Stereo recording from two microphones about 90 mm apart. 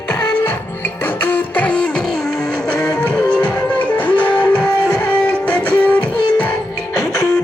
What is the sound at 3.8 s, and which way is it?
Music, 15° left (ahead or behind).